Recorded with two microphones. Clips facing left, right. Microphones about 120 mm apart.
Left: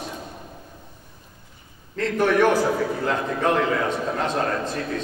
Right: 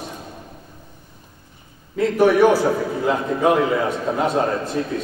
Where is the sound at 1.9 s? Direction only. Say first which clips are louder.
Right 5 dB; 10° right (ahead or behind).